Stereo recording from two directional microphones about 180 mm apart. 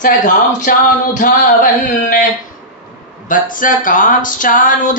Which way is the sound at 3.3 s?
50° left (ahead or behind).